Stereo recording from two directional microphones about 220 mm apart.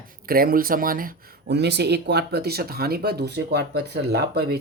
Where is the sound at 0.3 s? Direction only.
40° right (ahead or behind).